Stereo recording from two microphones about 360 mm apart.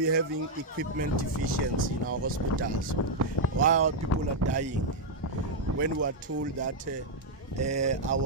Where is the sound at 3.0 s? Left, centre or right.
Left.